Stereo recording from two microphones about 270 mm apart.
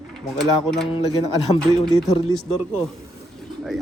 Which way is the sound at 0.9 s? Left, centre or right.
Centre.